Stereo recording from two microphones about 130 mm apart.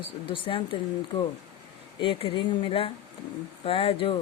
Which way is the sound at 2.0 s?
45° left (ahead or behind).